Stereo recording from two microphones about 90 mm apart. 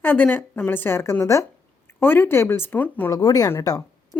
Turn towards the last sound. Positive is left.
turn(degrees=15)  # may be behind; listen again after turning